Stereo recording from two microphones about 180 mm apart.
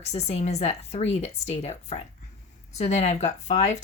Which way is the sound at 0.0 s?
40° left (ahead or behind).